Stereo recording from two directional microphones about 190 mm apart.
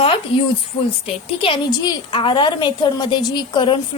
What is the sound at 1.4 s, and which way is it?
A woman's voice, 25° left (ahead or behind).